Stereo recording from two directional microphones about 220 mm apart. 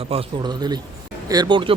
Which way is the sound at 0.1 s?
20° right (ahead or behind).